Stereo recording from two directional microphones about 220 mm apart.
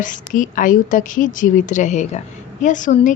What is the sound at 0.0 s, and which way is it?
A woman's voice, 35° left (ahead or behind).